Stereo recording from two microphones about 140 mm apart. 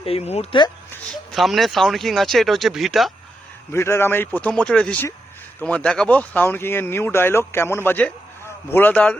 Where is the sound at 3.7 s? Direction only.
20° left (ahead or behind).